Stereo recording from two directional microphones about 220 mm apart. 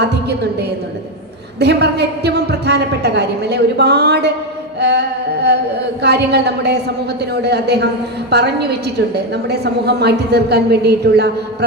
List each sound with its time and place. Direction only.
0.0 s a woman's voice: 50° right (ahead or behind)
1.5 s a woman's voice: 50° right (ahead or behind)
4.8 s music: 50° right (ahead or behind)
6.0 s a woman's voice: 50° right (ahead or behind)